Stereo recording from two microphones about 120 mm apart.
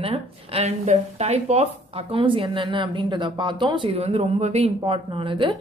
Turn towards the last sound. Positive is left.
turn(degrees=-45)  # may be behind; listen again after turning